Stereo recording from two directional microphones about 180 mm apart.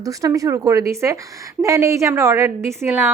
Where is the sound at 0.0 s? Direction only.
20° right (ahead or behind).